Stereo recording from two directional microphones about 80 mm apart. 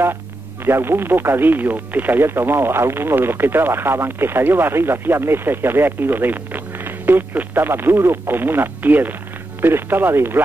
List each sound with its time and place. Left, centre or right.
0.7 s speech: right